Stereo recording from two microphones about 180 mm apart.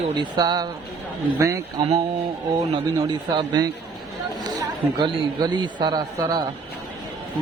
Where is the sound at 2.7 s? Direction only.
25° right (ahead or behind).